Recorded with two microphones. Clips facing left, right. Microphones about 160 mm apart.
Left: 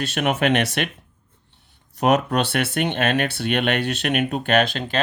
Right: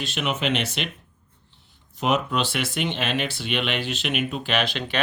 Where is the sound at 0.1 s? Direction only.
60° left (ahead or behind).